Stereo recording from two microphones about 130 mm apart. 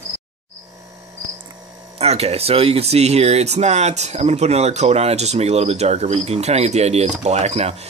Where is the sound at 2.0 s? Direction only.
55° right (ahead or behind).